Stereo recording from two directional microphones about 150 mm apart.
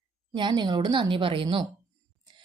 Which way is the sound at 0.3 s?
30° right (ahead or behind).